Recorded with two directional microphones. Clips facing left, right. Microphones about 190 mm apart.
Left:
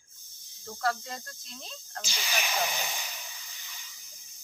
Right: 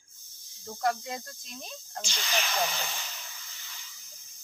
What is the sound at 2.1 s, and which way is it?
Speech, 15° left (ahead or behind).